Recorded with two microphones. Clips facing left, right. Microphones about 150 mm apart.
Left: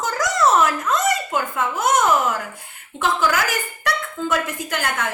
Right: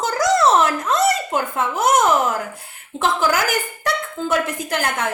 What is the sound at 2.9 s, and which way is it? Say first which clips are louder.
Speech: right 1 dB; 35° right (ahead or behind).